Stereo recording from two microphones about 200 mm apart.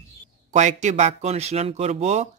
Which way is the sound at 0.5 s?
35° right (ahead or behind).